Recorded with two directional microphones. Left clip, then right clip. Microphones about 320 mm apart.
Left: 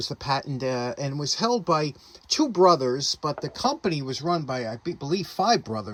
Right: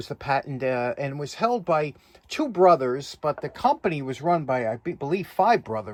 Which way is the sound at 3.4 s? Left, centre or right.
Centre.